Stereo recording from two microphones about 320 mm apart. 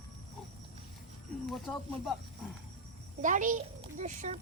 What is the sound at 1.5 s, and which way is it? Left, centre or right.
Snake, centre.